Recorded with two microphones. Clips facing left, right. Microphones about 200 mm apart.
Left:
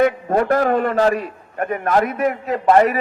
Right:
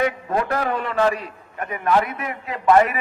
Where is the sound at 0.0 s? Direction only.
45° left (ahead or behind).